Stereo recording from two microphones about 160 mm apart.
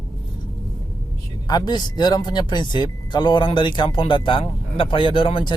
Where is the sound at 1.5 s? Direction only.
25° left (ahead or behind).